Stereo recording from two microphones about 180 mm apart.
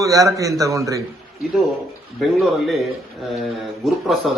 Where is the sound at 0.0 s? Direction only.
20° right (ahead or behind).